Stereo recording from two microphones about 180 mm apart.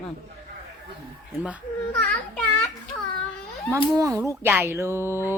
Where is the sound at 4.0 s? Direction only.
15° right (ahead or behind).